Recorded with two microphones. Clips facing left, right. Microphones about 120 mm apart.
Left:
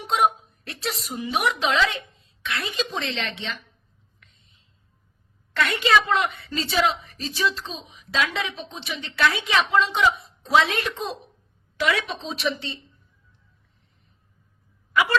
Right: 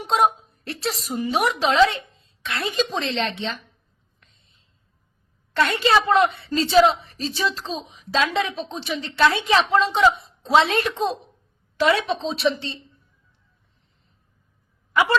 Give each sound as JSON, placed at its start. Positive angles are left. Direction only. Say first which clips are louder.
{"t": 0.0, "sound": "speech", "louder": "right 2 dB", "side_deg": -35}
{"t": 4.2, "sound": "whispering", "louder": "even", "side_deg": -35}
{"t": 5.5, "sound": "speech", "louder": "right 2 dB", "side_deg": -30}